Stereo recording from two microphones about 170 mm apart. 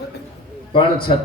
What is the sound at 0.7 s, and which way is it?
Speech, 30° left (ahead or behind).